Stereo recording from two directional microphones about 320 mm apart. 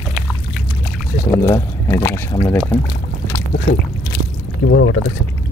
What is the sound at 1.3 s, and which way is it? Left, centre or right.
Speech, centre.